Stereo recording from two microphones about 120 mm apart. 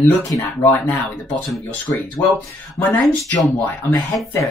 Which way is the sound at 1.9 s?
20° left (ahead or behind).